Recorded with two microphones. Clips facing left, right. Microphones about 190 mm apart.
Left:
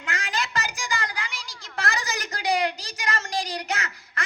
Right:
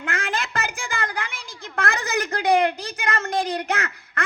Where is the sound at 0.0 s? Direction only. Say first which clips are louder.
Right 3 dB; 55° right (ahead or behind).